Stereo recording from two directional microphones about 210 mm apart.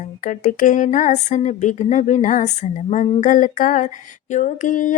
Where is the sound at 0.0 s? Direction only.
40° left (ahead or behind).